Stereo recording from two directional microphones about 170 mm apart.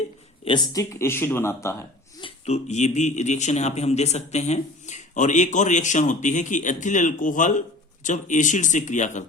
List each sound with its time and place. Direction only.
0.4 s speech: 25° left (ahead or behind)
2.2 s speech: 40° left (ahead or behind)